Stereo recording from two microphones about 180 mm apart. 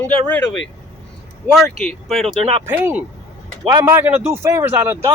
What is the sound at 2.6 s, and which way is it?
A man's voice, 10° right (ahead or behind).